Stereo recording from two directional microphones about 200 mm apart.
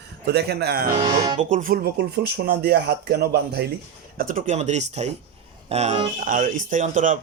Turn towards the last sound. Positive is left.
turn(degrees=-40)  # may be behind; listen again after turning